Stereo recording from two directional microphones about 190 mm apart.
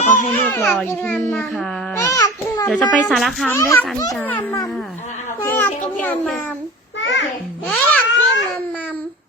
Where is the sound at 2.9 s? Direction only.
5° left (ahead or behind).